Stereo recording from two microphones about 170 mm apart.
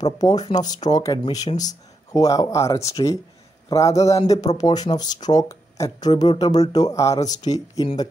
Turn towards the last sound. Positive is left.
turn(degrees=20)  # may be behind; listen again after turning